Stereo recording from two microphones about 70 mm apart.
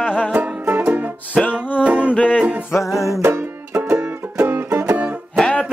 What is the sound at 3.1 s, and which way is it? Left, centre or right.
Music, right.